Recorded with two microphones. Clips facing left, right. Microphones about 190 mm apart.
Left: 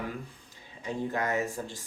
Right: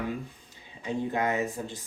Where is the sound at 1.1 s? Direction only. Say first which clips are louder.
Right 1 dB; 20° right (ahead or behind).